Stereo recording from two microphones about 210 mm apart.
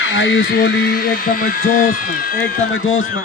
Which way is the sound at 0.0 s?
65° left (ahead or behind).